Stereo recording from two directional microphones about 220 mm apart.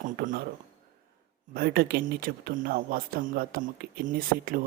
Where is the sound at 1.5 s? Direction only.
45° right (ahead or behind).